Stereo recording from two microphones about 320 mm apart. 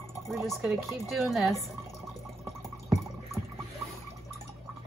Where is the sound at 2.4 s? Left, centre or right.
Centre.